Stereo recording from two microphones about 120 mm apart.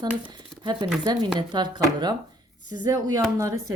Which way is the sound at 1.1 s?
40° right (ahead or behind).